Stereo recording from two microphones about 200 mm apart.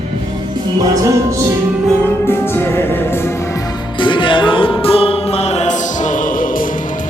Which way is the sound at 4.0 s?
25° left (ahead or behind).